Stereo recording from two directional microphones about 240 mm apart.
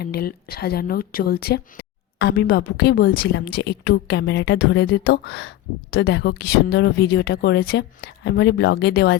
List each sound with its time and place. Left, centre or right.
0.0 s a woman's voice: left